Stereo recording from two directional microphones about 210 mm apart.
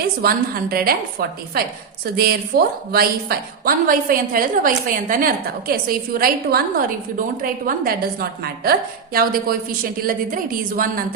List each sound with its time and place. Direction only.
0.2 s a woman's voice: 45° right (ahead or behind)